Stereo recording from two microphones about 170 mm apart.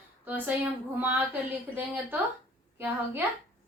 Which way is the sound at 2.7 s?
10° right (ahead or behind).